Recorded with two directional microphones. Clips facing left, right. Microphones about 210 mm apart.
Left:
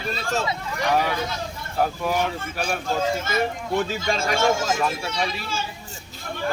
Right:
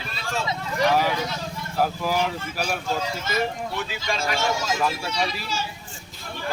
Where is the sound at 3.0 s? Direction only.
50° left (ahead or behind).